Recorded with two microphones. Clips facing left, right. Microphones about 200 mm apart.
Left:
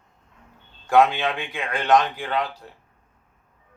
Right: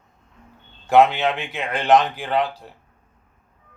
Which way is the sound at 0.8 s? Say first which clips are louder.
Right 3 dB; 25° right (ahead or behind).